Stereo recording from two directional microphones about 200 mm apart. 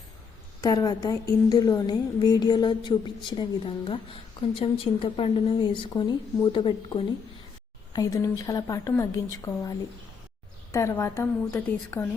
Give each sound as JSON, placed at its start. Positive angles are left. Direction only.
{"t": 0.6, "sound": "speech", "side_deg": 20}